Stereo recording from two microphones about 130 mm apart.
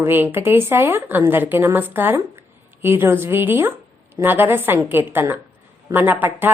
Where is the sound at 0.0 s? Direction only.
15° right (ahead or behind).